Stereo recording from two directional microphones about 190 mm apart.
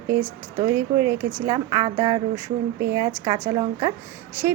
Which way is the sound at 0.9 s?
15° right (ahead or behind).